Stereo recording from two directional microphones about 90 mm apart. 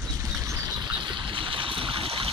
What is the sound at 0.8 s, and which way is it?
Boat, 65° right (ahead or behind).